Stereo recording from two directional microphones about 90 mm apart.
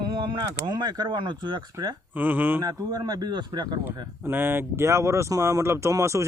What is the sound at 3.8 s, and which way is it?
Speech, 25° right (ahead or behind).